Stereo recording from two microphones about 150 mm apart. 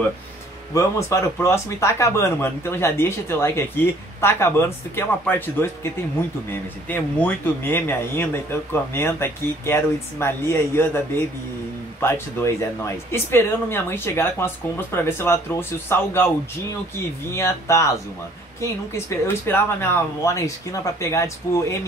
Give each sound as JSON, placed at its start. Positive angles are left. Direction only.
{"t": 0.7, "sound": "speech", "side_deg": 20}
{"t": 6.9, "sound": "speech", "side_deg": 10}
{"t": 12.0, "sound": "speech", "side_deg": 15}
{"t": 17.3, "sound": "speech", "side_deg": 15}
{"t": 19.0, "sound": "speech", "side_deg": 15}